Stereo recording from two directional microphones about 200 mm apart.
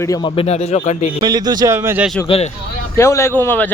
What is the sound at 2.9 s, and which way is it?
Speech, 15° left (ahead or behind).